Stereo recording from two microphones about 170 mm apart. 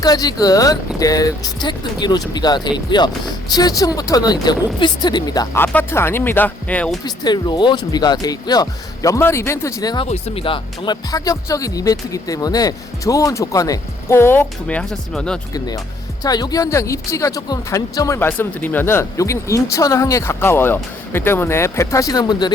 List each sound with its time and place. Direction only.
0.0 s speech: 20° left (ahead or behind)
7.0 s speech: 25° left (ahead or behind)
10.1 s speech: 35° left (ahead or behind); by 15.4 s 5° left (ahead or behind)
15.5 s speech: 20° left (ahead or behind)